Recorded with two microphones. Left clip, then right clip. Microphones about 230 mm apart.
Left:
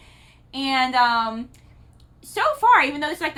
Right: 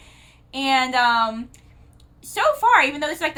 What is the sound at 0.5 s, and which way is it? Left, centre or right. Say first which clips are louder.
A woman's voice: right 1 dB; centre.